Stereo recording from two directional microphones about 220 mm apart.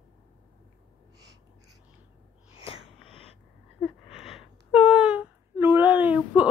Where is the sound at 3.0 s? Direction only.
25° left (ahead or behind).